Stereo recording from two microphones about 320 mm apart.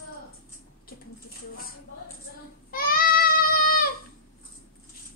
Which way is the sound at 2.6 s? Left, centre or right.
Left.